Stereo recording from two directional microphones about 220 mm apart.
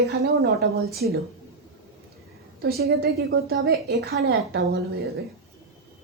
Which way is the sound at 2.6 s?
45° right (ahead or behind).